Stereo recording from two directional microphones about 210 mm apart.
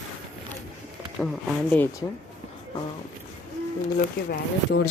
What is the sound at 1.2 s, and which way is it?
Speech, 5° left (ahead or behind).